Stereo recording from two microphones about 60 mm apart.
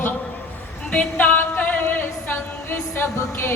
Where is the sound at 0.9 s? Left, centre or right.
Left.